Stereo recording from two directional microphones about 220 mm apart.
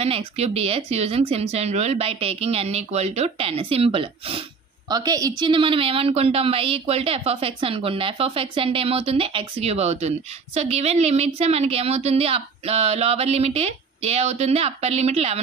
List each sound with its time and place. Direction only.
0.0 s a woman's voice: 25° right (ahead or behind)